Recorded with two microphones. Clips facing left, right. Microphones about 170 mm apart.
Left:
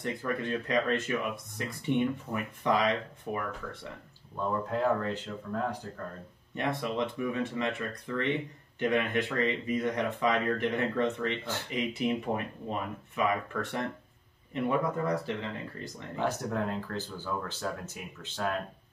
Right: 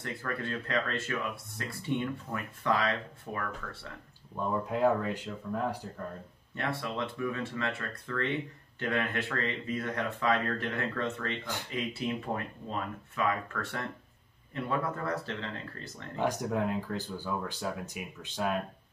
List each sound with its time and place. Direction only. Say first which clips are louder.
0.0 s speech: left 4 dB; 15° left (ahead or behind)
4.6 s speech: right 2 dB; 10° right (ahead or behind)
6.5 s speech: left 3 dB; 15° left (ahead or behind)
16.2 s speech: right 1 dB; 15° right (ahead or behind)